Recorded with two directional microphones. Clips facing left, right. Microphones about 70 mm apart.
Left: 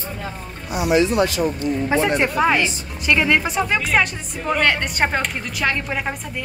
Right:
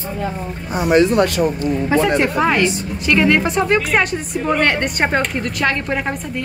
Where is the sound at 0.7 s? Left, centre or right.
Right.